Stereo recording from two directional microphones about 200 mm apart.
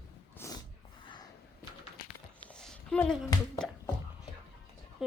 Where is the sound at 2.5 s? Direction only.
5° left (ahead or behind).